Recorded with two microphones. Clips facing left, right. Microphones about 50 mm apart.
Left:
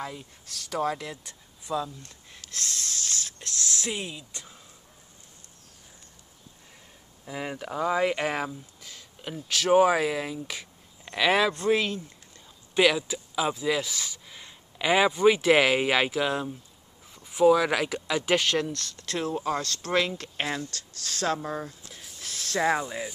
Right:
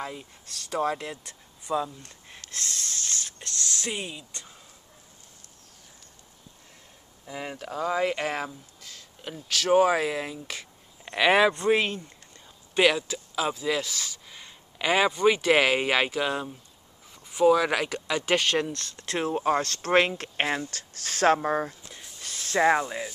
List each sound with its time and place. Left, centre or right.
0.0 s speech: centre
0.5 s speech: centre
0.7 s speech: centre
2.7 s speech: centre
7.2 s speech: centre
11.1 s speech: centre
13.3 s speech: centre
14.2 s a sound: centre
15.2 s speech: centre
18.6 s speech: right
21.9 s a sound: centre
22.5 s speech: centre